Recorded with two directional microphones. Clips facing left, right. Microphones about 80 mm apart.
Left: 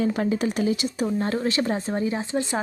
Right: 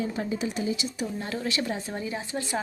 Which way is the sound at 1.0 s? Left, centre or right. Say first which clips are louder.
Left 7 dB; left.